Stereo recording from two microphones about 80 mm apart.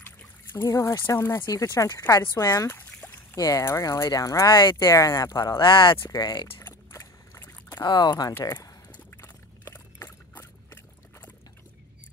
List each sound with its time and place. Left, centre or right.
0.0 s a sound: left
0.7 s speech: left
1.0 s speech: left
1.5 s speech: left
4.5 s speech: left
4.8 s speech: left
5.6 s speech: left
6.0 s speech: left
6.9 s boat: left
7.8 s speech: left
8.4 s speech: left
9.1 s a sound: left
10.3 s a sound: left